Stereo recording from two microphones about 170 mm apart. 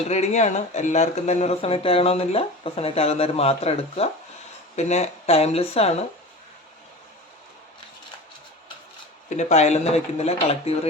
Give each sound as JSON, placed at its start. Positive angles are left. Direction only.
{"t": 0.1, "sound": "speech", "side_deg": 40}
{"t": 9.3, "sound": "speech", "side_deg": 40}